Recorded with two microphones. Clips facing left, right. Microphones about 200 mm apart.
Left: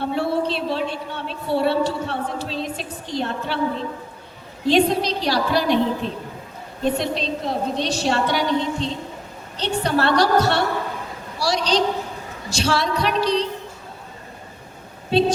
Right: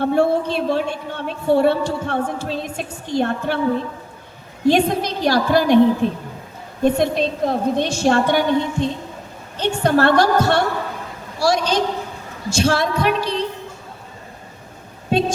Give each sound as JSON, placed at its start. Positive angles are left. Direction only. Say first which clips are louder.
{"t": 0.0, "sound": "a woman's voice", "louder": "right 5 dB", "side_deg": -50}
{"t": 4.6, "sound": "a woman's voice", "louder": "right 1 dB", "side_deg": -50}
{"t": 11.3, "sound": "a sound", "louder": "right 3 dB", "side_deg": -50}
{"t": 12.5, "sound": "a woman's voice", "louder": "right 4 dB", "side_deg": -50}